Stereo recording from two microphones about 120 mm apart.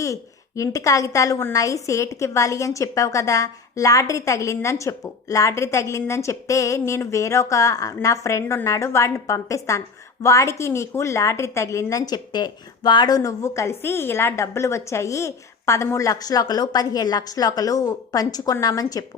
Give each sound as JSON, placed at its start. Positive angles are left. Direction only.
{"t": 0.0, "sound": "a woman's voice", "side_deg": 25}